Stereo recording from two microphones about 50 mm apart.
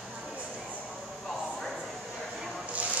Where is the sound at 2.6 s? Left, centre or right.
Right.